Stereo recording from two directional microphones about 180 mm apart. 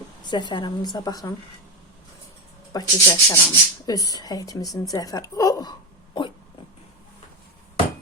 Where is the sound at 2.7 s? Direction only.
25° left (ahead or behind).